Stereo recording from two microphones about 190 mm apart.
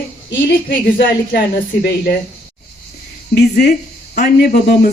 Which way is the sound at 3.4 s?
60° left (ahead or behind).